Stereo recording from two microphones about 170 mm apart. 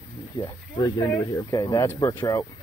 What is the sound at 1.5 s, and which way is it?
A man's voice, 20° left (ahead or behind).